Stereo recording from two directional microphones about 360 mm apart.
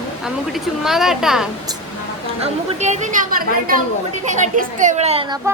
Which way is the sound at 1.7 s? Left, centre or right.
Centre.